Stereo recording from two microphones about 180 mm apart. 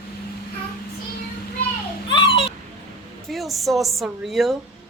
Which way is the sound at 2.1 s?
25° left (ahead or behind).